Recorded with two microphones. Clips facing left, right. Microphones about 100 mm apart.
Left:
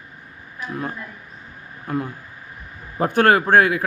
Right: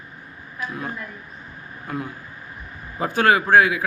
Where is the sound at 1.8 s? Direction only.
35° left (ahead or behind).